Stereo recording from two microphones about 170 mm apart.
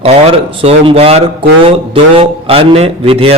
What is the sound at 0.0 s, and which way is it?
Speech, 35° right (ahead or behind).